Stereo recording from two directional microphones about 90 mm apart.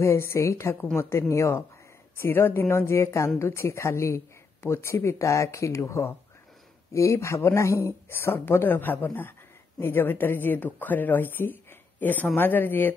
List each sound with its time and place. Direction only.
0.0 s speech: 30° left (ahead or behind)